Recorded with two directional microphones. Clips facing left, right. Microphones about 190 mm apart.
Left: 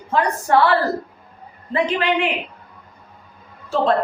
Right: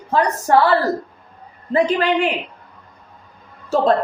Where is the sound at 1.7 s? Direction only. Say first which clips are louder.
Right 3 dB; 40° right (ahead or behind).